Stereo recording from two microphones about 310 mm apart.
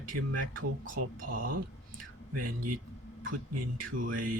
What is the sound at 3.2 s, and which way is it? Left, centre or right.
Speech, right.